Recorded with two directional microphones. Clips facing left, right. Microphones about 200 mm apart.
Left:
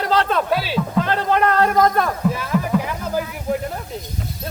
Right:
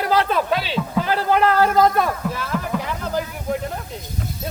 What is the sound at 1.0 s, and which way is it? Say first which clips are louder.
A man's voice: right 1 dB; 5° right (ahead or behind).